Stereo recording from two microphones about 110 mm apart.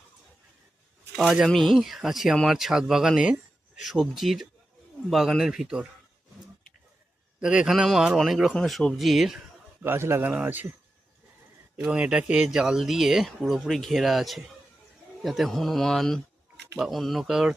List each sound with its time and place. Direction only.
1.1 s speech: 5° right (ahead or behind)
7.3 s speech: 10° right (ahead or behind)
9.8 s a man's voice: 20° right (ahead or behind)
11.8 s speech: 10° right (ahead or behind)